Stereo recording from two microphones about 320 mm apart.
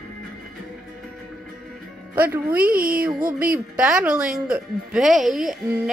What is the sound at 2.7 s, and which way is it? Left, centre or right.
Speech, right.